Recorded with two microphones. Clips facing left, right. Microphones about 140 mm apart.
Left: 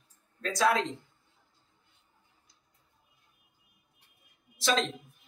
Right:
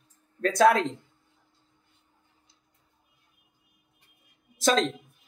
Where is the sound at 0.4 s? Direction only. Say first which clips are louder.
Right 7 dB; 55° right (ahead or behind).